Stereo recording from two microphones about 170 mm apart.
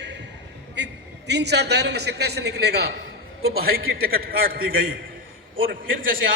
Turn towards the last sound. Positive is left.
turn(degrees=-55)  # may be behind; listen again after turning